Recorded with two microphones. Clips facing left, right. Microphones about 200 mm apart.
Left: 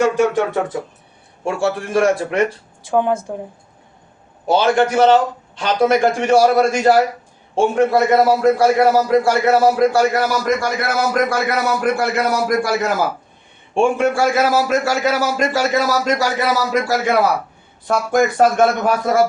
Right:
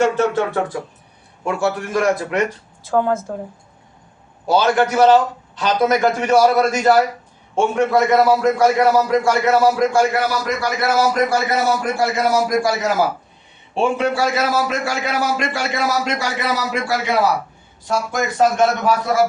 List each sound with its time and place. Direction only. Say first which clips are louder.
0.2 s speech: left 2 dB; 15° left (ahead or behind)
1.5 s a man's voice: left 1 dB; 30° left (ahead or behind)
2.8 s speech: left 1 dB; 15° left (ahead or behind)
4.4 s a man's voice: left 1 dB; 25° left (ahead or behind); by 10.8 s 45° left (ahead or behind)
11.3 s a man's voice: right 1 dB; 60° left (ahead or behind); by 17.2 s 40° left (ahead or behind)
17.8 s a man's voice: left 5 dB; 55° left (ahead or behind)